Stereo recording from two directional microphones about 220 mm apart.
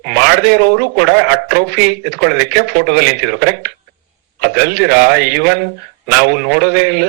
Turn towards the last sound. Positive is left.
turn(degrees=-50)  # may be behind; listen again after turning